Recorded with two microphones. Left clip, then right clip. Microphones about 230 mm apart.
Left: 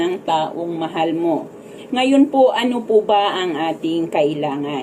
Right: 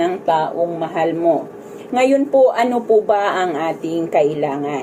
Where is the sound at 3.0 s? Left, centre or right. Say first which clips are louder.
Even; left.